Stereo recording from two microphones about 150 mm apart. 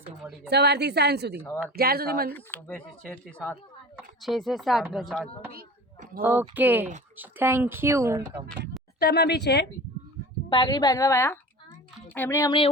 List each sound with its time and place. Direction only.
0.5 s a woman's voice: 90° right
2.3 s speech: 10° left (ahead or behind)
5.5 s a sound: 80° right
6.5 s speech: 10° right (ahead or behind)
9.0 s speech: 90° left
10.5 s a woman's voice: 30° left (ahead or behind)